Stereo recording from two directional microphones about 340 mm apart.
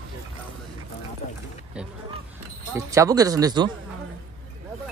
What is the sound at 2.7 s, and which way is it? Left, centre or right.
Speech, centre.